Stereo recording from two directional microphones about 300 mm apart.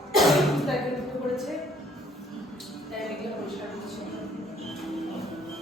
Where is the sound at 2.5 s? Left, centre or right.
Centre.